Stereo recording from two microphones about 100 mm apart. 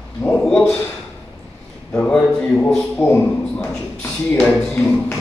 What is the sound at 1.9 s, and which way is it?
Speech, 10° left (ahead or behind).